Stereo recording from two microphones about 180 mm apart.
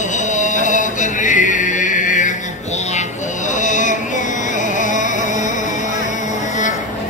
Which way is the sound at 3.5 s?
45° left (ahead or behind).